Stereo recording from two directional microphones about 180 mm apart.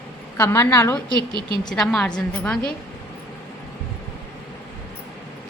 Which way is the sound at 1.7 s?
Centre (ahead or behind).